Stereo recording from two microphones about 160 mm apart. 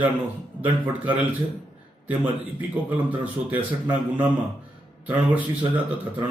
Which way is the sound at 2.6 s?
10° right (ahead or behind).